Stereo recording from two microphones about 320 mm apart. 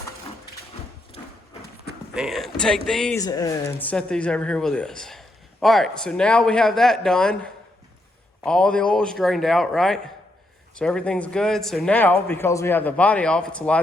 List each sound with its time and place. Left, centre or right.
1.2 s horse: centre
2.1 s speech: centre